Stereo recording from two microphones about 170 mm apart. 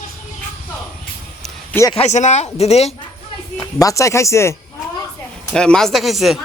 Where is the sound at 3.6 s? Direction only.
20° left (ahead or behind).